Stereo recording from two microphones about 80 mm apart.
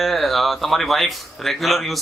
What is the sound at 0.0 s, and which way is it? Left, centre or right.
Speech, centre.